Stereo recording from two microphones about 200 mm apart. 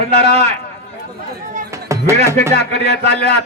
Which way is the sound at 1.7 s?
15° right (ahead or behind).